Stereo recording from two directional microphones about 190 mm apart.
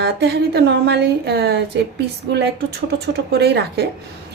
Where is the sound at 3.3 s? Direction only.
60° right (ahead or behind).